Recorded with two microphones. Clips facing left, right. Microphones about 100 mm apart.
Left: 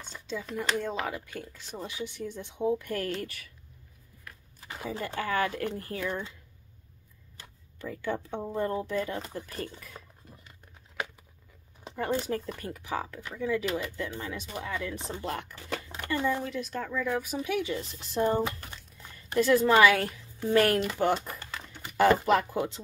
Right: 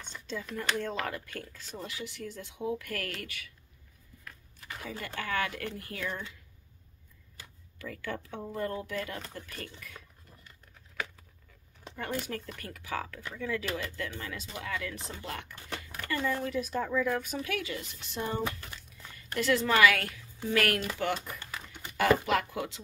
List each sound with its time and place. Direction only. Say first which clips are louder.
0.0 s a sound: left 2 dB; 10° left (ahead or behind)
0.6 s speech: left 2 dB; 10° left (ahead or behind); by 3.5 s 40° left (ahead or behind)
4.6 s speech: left 5 dB; 25° left (ahead or behind)
7.8 s speech: left 5 dB; 25° left (ahead or behind)
11.9 s speech: left 6 dB; 30° left (ahead or behind)
15.9 s speech: left 3 dB; 20° left (ahead or behind)
16.4 s speech: right 2 dB; 5° right (ahead or behind)
17.4 s speech: left 5 dB; 20° left (ahead or behind)
17.7 s speech: left 7 dB; 35° left (ahead or behind)
19.2 s speech: left 5 dB; 20° left (ahead or behind)